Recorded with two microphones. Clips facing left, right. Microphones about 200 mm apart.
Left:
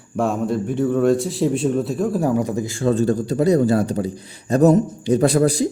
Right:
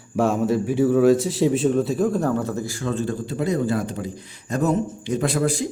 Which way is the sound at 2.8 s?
35° left (ahead or behind).